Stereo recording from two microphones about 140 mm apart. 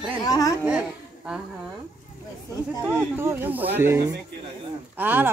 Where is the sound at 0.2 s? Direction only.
25° left (ahead or behind).